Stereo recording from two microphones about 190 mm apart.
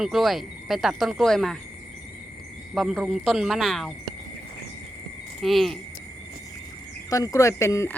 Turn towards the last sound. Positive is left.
turn(degrees=15)  # may be behind; listen again after turning